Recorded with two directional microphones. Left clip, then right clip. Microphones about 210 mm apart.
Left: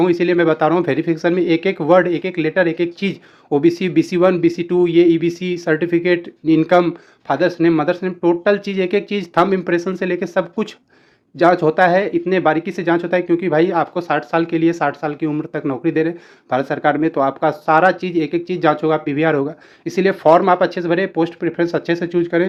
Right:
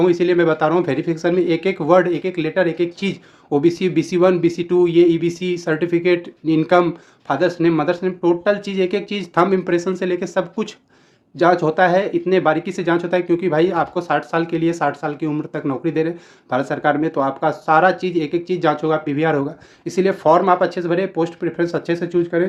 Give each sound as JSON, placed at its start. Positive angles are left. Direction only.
{"t": 0.0, "sound": "speech", "side_deg": 25}